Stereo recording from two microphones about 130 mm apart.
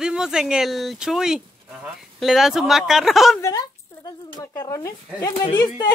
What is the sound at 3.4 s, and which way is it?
Speech, 30° left (ahead or behind).